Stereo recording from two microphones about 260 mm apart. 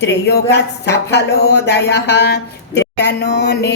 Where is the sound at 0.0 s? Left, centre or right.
Left.